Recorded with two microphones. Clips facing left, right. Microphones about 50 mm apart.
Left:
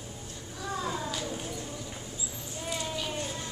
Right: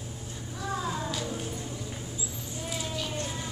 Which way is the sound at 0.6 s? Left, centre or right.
Centre.